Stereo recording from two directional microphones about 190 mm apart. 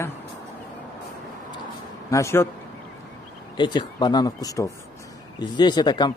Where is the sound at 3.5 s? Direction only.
25° left (ahead or behind).